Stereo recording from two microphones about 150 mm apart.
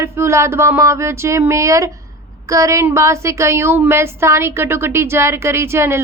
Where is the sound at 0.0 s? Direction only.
15° right (ahead or behind).